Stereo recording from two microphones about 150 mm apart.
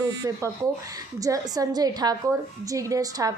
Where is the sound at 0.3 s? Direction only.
20° right (ahead or behind).